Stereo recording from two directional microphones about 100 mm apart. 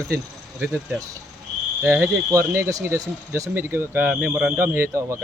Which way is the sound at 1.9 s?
25° right (ahead or behind).